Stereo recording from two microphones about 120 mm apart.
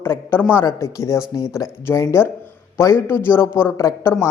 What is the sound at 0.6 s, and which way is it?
Speech, 25° left (ahead or behind).